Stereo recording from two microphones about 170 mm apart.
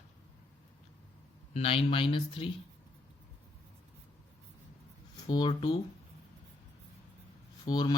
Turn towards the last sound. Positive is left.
turn(degrees=25)  # may be behind; listen again after turning